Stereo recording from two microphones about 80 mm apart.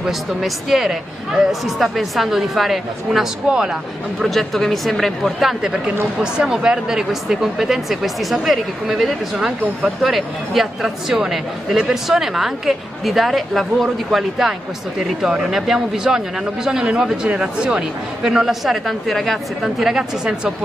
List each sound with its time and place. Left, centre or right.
0.0 s speech: centre
4.2 s speech: centre